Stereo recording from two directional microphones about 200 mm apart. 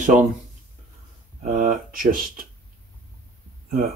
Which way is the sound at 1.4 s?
40° right (ahead or behind).